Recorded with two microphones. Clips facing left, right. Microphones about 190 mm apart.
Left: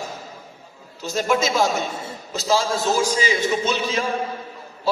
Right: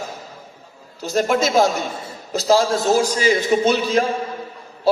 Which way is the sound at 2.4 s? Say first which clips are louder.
Right 5 dB; 55° right (ahead or behind).